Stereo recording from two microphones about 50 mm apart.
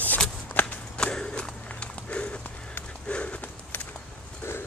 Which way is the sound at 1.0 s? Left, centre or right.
Centre.